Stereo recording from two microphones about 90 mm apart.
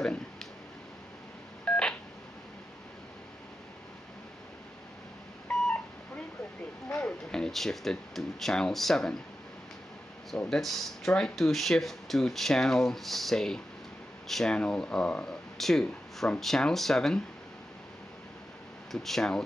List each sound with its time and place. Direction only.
0.0 s a sound: 5° left (ahead or behind)
1.6 s telephone dialing: 10° left (ahead or behind)
5.5 s beep: 5° left (ahead or behind)
6.9 s speech: 10° left (ahead or behind)
10.5 s speech: 5° left (ahead or behind)
18.9 s speech: 5° left (ahead or behind)